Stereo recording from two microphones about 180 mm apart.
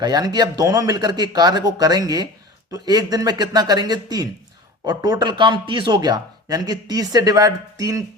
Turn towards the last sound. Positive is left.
turn(degrees=-20)  # may be behind; listen again after turning